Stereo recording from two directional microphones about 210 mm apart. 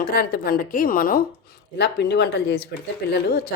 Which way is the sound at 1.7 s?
55° left (ahead or behind).